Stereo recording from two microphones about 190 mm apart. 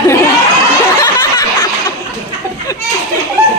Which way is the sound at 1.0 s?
20° left (ahead or behind).